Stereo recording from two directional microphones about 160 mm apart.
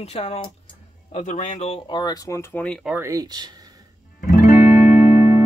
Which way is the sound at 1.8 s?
25° left (ahead or behind).